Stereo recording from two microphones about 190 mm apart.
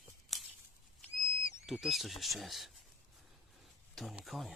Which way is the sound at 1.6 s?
Centre (ahead or behind).